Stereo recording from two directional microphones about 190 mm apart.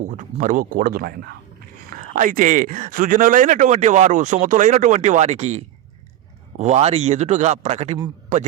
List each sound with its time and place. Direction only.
0.0 s speech: 40° right (ahead or behind)